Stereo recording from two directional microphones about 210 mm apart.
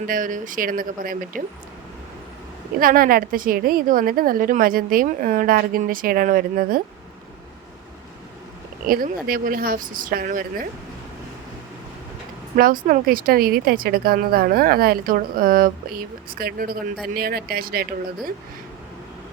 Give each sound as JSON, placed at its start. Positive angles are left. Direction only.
{"t": 0.1, "sound": "speech", "side_deg": -40}
{"t": 2.8, "sound": "speech", "side_deg": -45}
{"t": 8.9, "sound": "speech", "side_deg": -45}
{"t": 12.5, "sound": "speech", "side_deg": -40}